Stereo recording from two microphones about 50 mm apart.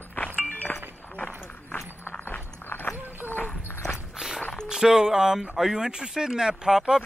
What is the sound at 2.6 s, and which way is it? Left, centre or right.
Horse, left.